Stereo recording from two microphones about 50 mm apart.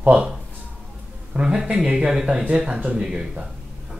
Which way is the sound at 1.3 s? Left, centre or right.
Centre.